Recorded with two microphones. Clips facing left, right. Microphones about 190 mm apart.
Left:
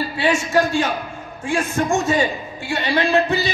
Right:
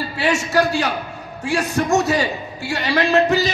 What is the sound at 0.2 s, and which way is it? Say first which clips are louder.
A man's voice: even; 40° right (ahead or behind).